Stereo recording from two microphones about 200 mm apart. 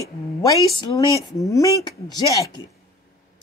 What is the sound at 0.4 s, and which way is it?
Speech, 15° left (ahead or behind).